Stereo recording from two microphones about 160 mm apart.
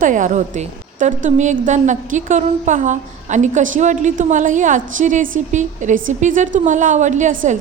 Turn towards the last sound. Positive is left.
turn(degrees=-55)  # may be behind; listen again after turning